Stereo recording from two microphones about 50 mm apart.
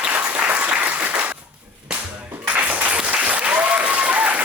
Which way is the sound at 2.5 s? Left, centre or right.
Right.